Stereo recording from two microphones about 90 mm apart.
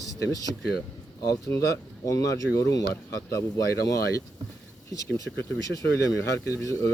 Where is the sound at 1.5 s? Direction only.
30° left (ahead or behind).